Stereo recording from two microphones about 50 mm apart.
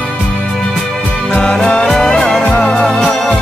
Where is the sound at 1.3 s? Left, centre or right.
Left.